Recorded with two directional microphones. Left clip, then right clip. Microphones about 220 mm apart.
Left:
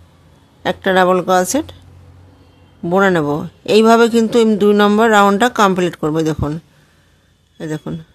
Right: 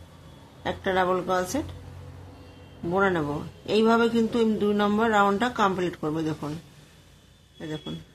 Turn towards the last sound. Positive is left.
turn(degrees=50)  # may be behind; listen again after turning